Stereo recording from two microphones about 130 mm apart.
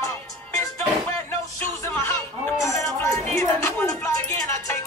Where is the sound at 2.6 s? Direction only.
25° left (ahead or behind).